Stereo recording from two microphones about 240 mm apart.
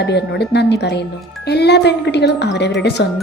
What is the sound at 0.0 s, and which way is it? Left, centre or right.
Speech, left.